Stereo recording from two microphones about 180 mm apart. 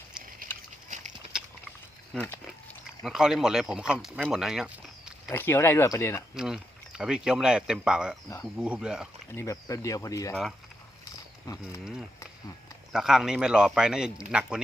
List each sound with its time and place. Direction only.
0.2 s a sound: 5° right (ahead or behind)
0.9 s a sound: 45° right (ahead or behind)
1.3 s a sound: 5° right (ahead or behind)
2.1 s speech: 10° left (ahead or behind)
2.5 s speech: centre (ahead or behind)
5.3 s speech: 10° left (ahead or behind)
6.3 s speech: 5° right (ahead or behind)
9.3 s speech: 15° left (ahead or behind)
11.5 s speech: 20° left (ahead or behind)
12.9 s speech: 5° right (ahead or behind)